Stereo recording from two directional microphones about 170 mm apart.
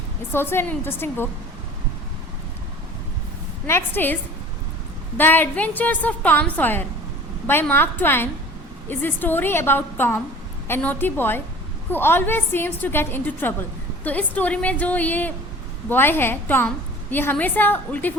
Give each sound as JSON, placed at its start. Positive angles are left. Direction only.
{"t": 0.3, "sound": "a woman's voice", "side_deg": 15}
{"t": 3.7, "sound": "a woman's voice", "side_deg": 15}